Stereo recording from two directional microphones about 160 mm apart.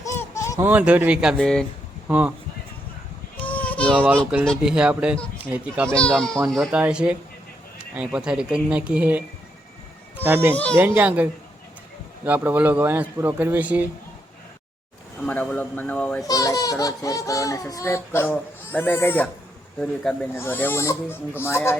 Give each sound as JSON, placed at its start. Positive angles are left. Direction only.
{"t": 0.2, "sound": "a sound", "side_deg": 20}
{"t": 0.5, "sound": "a man's voice", "side_deg": -15}
{"t": 2.0, "sound": "a man's voice", "side_deg": -10}
{"t": 3.4, "sound": "a sound", "side_deg": 10}
{"t": 3.9, "sound": "a man's voice", "side_deg": -10}
{"t": 5.9, "sound": "speech", "side_deg": 5}
{"t": 10.2, "sound": "a man's voice", "side_deg": -10}
{"t": 10.5, "sound": "speech", "side_deg": 10}
{"t": 10.8, "sound": "a man's voice", "side_deg": -10}
{"t": 15.2, "sound": "speech", "side_deg": 10}
{"t": 16.2, "sound": "speech", "side_deg": 20}
{"t": 20.3, "sound": "speech", "side_deg": 15}